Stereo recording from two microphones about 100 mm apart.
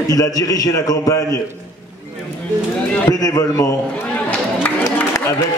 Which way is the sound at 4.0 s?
15° left (ahead or behind).